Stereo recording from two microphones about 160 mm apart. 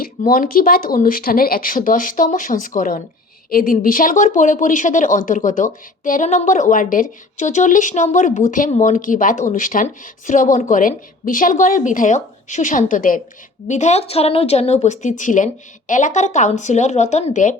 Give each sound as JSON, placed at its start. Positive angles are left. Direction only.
{"t": 0.0, "sound": "speech", "side_deg": 65}